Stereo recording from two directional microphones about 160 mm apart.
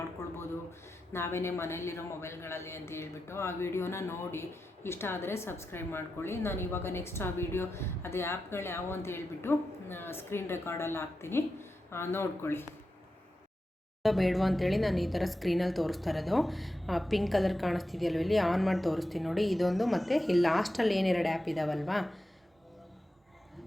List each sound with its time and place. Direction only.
1.1 s a man's voice: 15° left (ahead or behind)
14.0 s a woman's voice: centre (ahead or behind)